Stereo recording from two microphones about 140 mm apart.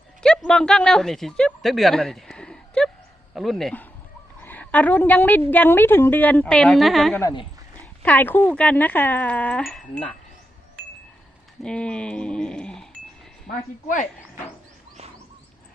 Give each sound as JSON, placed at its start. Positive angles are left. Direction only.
{"t": 0.2, "sound": "speech", "side_deg": 5}
{"t": 4.4, "sound": "a woman's voice", "side_deg": 10}
{"t": 8.0, "sound": "a woman's voice", "side_deg": 15}
{"t": 11.6, "sound": "a woman's voice", "side_deg": 5}
{"t": 13.5, "sound": "speech", "side_deg": 45}
{"t": 13.8, "sound": "speech", "side_deg": 65}